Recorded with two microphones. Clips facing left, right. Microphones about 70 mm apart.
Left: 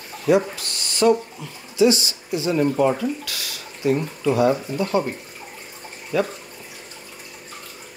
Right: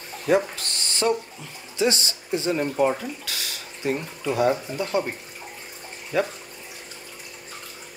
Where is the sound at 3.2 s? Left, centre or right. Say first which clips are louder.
Left 1 dB; right.